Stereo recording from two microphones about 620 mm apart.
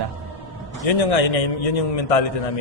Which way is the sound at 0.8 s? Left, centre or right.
Left.